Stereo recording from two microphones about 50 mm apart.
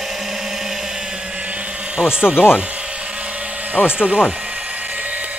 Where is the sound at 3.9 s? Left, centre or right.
Centre.